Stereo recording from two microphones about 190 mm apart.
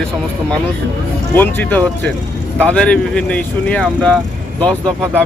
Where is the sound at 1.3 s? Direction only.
10° left (ahead or behind).